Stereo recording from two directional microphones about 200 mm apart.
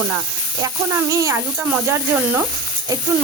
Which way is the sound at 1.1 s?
15° right (ahead or behind).